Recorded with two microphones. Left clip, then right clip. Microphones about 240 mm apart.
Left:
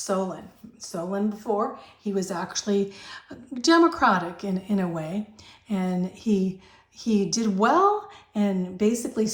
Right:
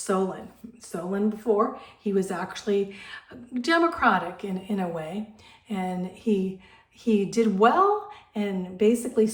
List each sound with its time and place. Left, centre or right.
0.8 s a woman's voice: centre